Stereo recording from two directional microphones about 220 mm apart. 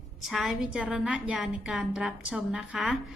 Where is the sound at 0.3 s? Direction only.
Centre (ahead or behind).